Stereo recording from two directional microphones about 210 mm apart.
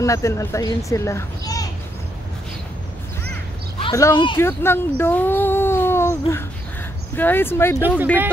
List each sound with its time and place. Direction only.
0.0 s a child's voice: 15° left (ahead or behind)
3.8 s a child's voice: 15° left (ahead or behind)